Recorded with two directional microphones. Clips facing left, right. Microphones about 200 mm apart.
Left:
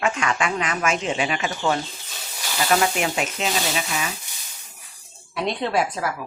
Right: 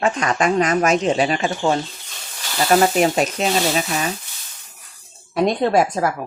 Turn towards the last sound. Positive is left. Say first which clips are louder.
# right 6 dB
turn(degrees=-45)  # may be behind; listen again after turning